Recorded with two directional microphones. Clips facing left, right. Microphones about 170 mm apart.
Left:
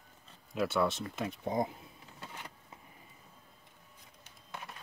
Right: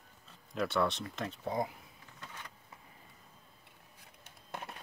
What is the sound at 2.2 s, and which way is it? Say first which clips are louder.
Vehicle: left 2 dB; 30° left (ahead or behind).